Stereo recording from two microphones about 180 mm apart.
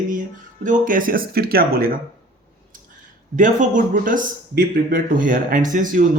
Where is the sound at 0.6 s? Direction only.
50° right (ahead or behind).